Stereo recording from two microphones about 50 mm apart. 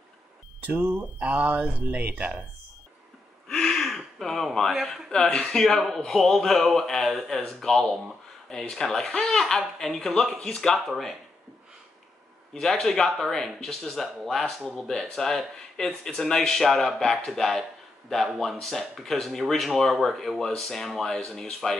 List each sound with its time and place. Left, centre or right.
0.7 s speech: right
1.2 s speech: right
3.4 s gasp: centre
4.8 s speech: centre
12.5 s speech: centre
14.9 s speech: centre